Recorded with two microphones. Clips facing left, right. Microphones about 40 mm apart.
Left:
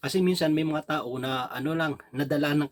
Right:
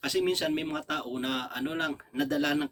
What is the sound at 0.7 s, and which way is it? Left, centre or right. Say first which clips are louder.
Speech: left 4 dB; left.